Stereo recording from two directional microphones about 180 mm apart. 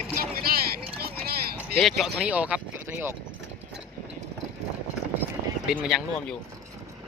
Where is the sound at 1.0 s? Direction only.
55° right (ahead or behind).